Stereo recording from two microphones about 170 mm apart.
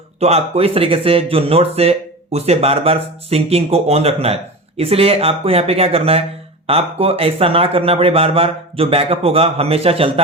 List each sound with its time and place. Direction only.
0.2 s speech: 40° right (ahead or behind)